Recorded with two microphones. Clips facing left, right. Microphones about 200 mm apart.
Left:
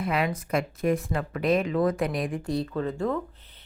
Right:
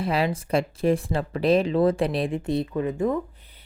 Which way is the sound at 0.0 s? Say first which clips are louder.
Right 3 dB; 30° right (ahead or behind).